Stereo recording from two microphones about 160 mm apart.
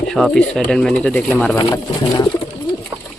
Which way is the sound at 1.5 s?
20° left (ahead or behind).